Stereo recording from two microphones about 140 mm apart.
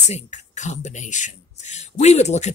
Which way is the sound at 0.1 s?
55° left (ahead or behind).